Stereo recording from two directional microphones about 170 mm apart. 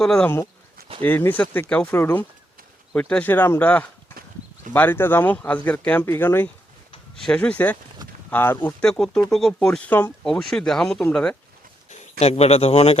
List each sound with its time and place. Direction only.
0.0 s speech: 5° left (ahead or behind)
12.2 s speech: 40° left (ahead or behind)